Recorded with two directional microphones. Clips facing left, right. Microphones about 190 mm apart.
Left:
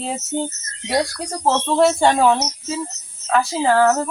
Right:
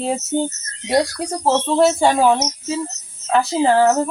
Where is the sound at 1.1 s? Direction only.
5° right (ahead or behind).